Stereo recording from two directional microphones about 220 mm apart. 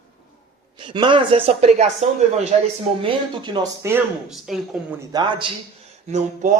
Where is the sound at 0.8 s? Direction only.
20° right (ahead or behind); by 4.8 s centre (ahead or behind).